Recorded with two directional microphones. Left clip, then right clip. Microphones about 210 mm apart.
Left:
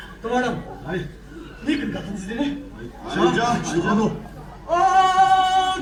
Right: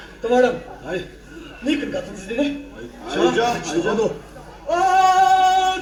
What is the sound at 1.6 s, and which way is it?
Speech, 35° right (ahead or behind).